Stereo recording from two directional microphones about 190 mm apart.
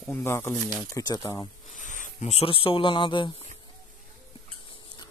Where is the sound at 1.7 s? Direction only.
40° left (ahead or behind); by 3.3 s 25° left (ahead or behind).